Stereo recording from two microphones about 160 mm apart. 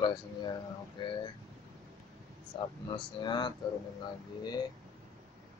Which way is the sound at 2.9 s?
30° left (ahead or behind).